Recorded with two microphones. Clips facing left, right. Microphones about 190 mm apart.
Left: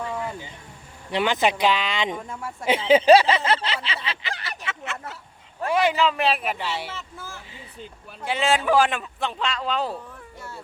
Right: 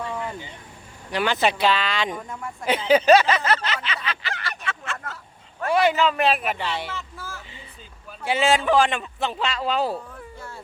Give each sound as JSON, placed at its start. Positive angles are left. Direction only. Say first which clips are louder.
{"t": 0.1, "sound": "vehicle", "louder": "even", "side_deg": 5}
{"t": 1.1, "sound": "speech", "louder": "even", "side_deg": 20}
{"t": 2.6, "sound": "a sound", "louder": "left 1 dB", "side_deg": 25}
{"t": 6.1, "sound": "a man's voice", "louder": "right 2 dB", "side_deg": 0}
{"t": 8.2, "sound": "a man's voice", "louder": "right 2 dB", "side_deg": -5}